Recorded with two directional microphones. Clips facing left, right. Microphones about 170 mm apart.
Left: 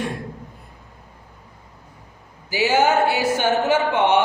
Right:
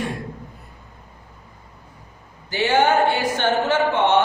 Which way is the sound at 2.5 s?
5° left (ahead or behind).